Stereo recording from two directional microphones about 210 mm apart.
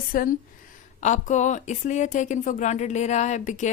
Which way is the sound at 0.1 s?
40° left (ahead or behind).